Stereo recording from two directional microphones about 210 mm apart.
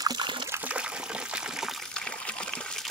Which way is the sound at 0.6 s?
5° right (ahead or behind).